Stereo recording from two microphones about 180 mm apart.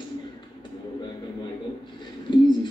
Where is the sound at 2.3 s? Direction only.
25° left (ahead or behind).